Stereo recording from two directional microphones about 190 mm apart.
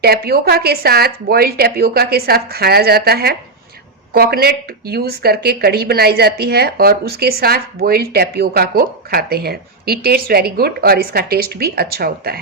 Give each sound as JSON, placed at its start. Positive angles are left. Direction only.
{"t": 0.0, "sound": "speech", "side_deg": -55}